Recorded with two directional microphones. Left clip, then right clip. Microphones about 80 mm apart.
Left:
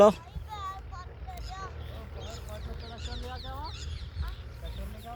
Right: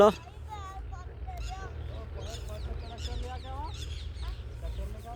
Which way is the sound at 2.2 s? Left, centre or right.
Left.